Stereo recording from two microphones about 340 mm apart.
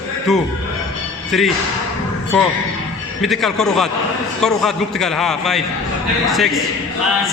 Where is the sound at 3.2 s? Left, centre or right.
Centre.